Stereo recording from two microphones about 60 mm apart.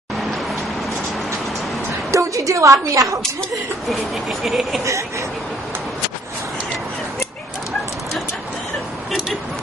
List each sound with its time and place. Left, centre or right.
2.0 s a woman's voice: right
3.9 s speech: centre